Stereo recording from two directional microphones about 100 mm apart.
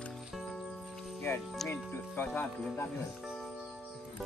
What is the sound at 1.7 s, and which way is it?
Speech, 20° left (ahead or behind).